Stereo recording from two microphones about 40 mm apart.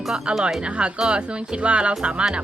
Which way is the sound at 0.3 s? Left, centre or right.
Right.